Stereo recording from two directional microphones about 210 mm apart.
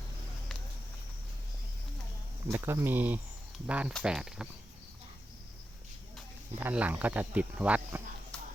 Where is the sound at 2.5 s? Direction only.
15° right (ahead or behind).